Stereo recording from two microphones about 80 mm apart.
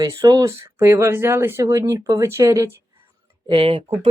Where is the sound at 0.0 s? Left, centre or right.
Right.